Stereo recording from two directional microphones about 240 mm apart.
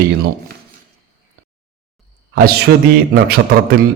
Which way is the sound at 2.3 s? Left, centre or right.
Right.